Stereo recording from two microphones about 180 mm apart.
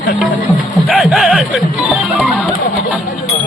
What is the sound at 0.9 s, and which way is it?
Speech, 5° right (ahead or behind).